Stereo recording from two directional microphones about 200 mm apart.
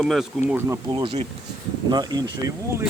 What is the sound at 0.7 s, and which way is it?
Speech, 25° right (ahead or behind).